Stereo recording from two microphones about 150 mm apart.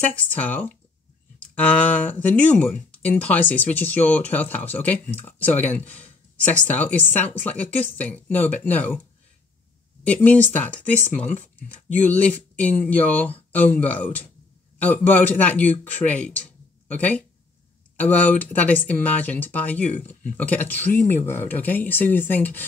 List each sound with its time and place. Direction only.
0.0 s speech: 10° left (ahead or behind)
10.0 s speech: 10° left (ahead or behind)